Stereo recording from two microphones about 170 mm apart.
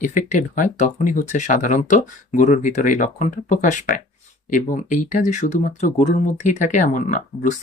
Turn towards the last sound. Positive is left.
turn(degrees=50)  # may be behind; listen again after turning